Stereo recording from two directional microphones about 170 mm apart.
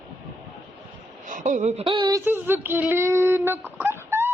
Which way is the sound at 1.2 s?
50° right (ahead or behind).